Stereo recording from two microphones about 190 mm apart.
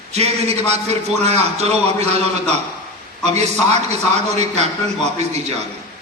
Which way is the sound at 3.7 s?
35° right (ahead or behind).